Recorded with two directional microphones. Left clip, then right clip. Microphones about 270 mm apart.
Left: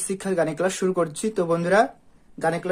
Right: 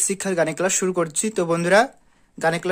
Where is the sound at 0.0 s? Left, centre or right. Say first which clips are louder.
Right 2 dB; right.